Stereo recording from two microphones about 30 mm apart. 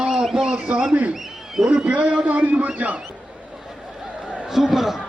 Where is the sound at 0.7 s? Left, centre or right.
Right.